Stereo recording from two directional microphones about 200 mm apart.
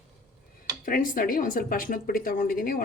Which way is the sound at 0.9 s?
45° left (ahead or behind).